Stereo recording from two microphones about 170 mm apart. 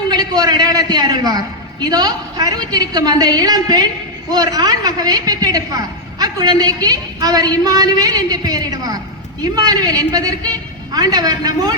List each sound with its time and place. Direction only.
0.1 s a woman's voice: 25° right (ahead or behind)